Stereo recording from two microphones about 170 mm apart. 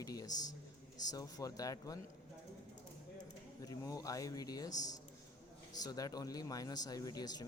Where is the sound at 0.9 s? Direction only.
20° left (ahead or behind).